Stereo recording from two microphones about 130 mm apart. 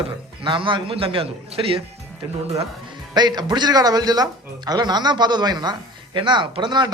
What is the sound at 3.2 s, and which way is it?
Speech, 35° right (ahead or behind).